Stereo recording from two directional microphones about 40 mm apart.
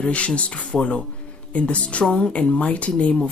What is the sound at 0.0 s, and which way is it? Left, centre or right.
Speech, left.